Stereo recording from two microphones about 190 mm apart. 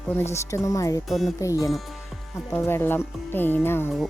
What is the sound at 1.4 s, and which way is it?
Speech, 15° left (ahead or behind).